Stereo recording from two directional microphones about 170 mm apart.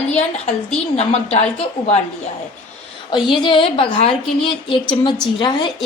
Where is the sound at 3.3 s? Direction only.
30° left (ahead or behind).